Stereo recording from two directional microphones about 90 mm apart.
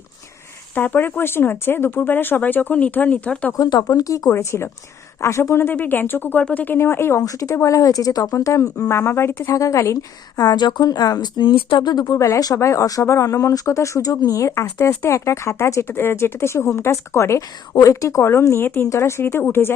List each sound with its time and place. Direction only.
0.7 s speech: 20° left (ahead or behind)
3.6 s speech: 50° left (ahead or behind); by 7.2 s 25° left (ahead or behind)
7.2 s speech: 40° left (ahead or behind)
9.6 s a woman's voice: 35° left (ahead or behind); by 11.9 s 70° left (ahead or behind)
11.9 s a woman's voice: 50° left (ahead or behind)
12.1 s speech: 30° left (ahead or behind)